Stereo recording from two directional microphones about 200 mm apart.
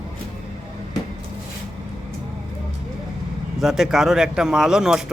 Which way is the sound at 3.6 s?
Centre (ahead or behind).